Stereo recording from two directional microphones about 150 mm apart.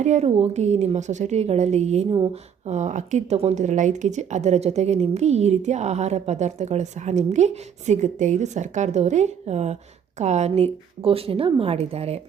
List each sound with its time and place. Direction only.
0.0 s a woman's voice: 50° right (ahead or behind)
2.0 s a woman's voice: 30° right (ahead or behind)
2.3 s a woman's voice: 50° right (ahead or behind)